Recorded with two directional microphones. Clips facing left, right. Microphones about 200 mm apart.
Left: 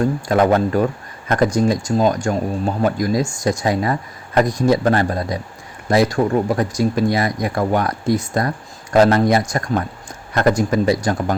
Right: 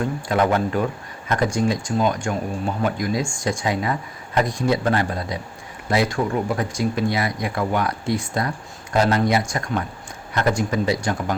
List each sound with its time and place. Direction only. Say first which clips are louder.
0.0 s speech: left 5 dB; 45° left (ahead or behind)